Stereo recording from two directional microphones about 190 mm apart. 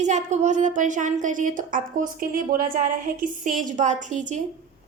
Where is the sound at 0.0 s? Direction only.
40° right (ahead or behind).